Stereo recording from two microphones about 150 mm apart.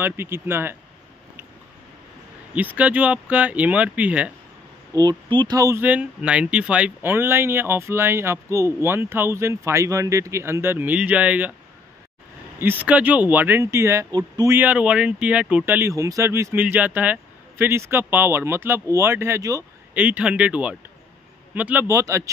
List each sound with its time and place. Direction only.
0.0 s speech: 15° right (ahead or behind)
2.5 s speech: 10° right (ahead or behind)
4.9 s speech: 30° right (ahead or behind); by 11.5 s 10° right (ahead or behind)
12.5 s speech: 15° right (ahead or behind)
14.5 s speech: 10° right (ahead or behind)
20.0 s a man's voice: 10° right (ahead or behind)